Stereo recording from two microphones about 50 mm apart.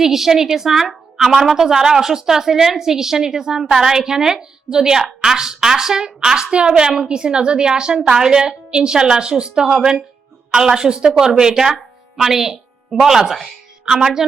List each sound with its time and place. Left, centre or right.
0.0 s a woman's voice: centre